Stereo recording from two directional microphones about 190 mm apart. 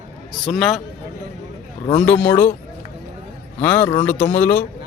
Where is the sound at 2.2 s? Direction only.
10° left (ahead or behind).